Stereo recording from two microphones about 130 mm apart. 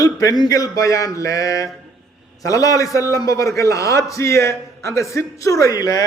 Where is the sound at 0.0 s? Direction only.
25° left (ahead or behind).